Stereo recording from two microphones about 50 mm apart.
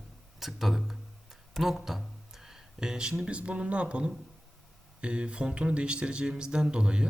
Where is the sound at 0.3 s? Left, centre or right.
Centre.